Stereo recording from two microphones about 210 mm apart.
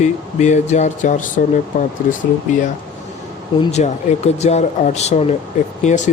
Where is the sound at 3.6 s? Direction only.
30° left (ahead or behind).